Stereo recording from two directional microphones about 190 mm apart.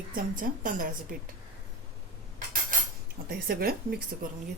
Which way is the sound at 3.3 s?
50° right (ahead or behind).